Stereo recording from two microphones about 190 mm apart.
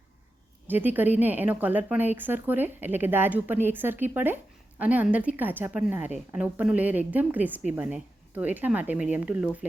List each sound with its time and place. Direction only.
0.7 s a woman's voice: 10° right (ahead or behind)